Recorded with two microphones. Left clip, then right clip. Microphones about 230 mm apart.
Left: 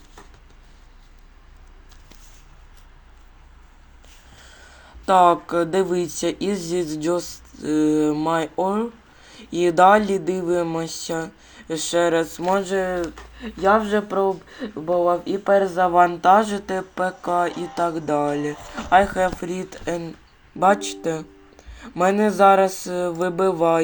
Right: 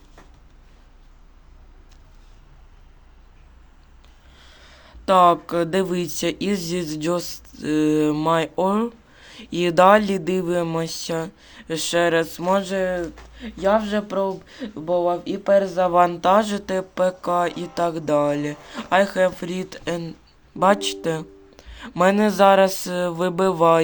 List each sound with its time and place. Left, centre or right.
4.4 s speech: right